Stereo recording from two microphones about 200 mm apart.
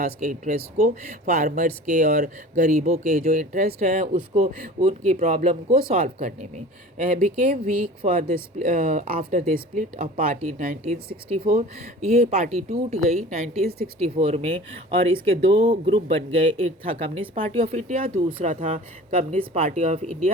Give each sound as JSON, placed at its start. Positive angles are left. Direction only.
{"t": 0.0, "sound": "speech", "side_deg": -40}
{"t": 12.0, "sound": "speech", "side_deg": -35}